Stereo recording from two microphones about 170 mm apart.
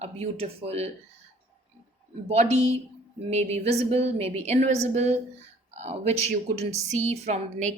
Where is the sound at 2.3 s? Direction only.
40° right (ahead or behind).